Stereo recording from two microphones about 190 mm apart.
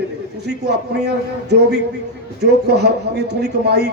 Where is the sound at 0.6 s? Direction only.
60° right (ahead or behind).